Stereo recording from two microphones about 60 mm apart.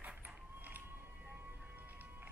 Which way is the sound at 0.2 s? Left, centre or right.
Right.